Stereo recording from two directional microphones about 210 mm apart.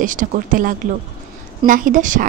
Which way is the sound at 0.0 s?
40° right (ahead or behind).